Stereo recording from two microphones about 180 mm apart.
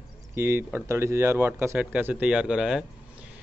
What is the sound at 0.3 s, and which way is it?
Speech, 10° right (ahead or behind).